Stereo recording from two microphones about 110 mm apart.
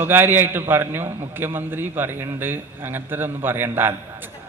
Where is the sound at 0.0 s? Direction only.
20° right (ahead or behind).